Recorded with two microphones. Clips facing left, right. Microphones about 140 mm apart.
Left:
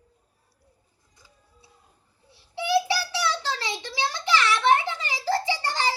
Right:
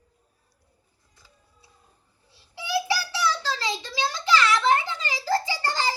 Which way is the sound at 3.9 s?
20° left (ahead or behind).